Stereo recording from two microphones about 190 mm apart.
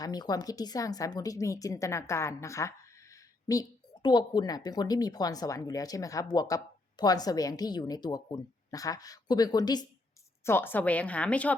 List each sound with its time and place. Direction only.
0.0 s a woman's voice: 20° left (ahead or behind)